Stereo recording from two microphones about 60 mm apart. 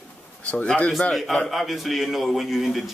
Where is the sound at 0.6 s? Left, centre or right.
Centre.